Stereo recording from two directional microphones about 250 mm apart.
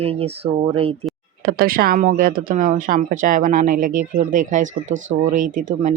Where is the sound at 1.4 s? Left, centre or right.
Right.